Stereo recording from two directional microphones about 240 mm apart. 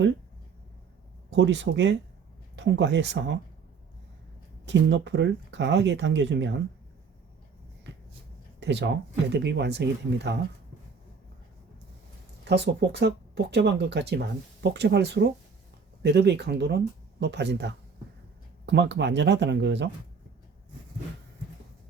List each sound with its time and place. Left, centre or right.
1.4 s speech: right
4.6 s speech: right
8.6 s speech: right
12.5 s speech: right